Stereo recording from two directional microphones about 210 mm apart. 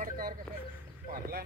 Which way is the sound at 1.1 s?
45° right (ahead or behind).